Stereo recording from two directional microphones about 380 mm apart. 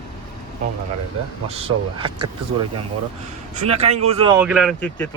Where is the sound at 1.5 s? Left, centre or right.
Centre.